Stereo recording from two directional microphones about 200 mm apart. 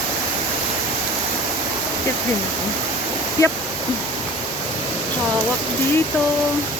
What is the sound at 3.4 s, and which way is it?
Speech, 15° left (ahead or behind).